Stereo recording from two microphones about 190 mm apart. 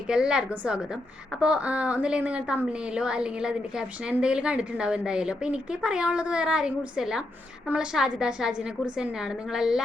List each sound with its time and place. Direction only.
0.1 s a woman's voice: 5° right (ahead or behind)